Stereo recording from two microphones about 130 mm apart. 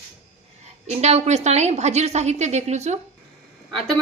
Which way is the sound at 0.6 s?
55° right (ahead or behind).